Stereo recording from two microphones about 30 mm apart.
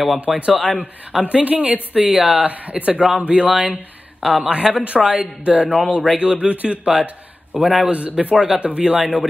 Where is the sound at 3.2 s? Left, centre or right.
Right.